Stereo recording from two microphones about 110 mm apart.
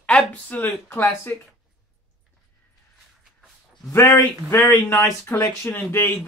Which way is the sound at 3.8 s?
30° left (ahead or behind).